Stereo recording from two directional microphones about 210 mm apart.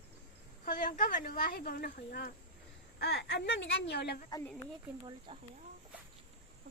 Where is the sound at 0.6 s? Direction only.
40° left (ahead or behind).